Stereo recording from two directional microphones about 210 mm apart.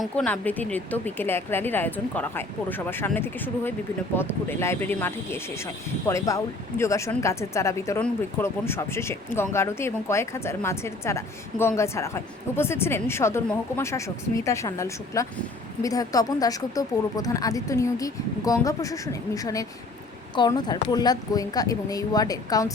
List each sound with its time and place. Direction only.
0.0 s speech: 5° left (ahead or behind)